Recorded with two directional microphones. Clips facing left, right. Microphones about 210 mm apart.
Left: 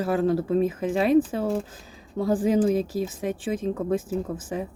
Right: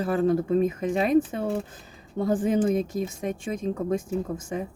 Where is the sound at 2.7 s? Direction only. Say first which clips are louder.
Left 1 dB; 30° left (ahead or behind).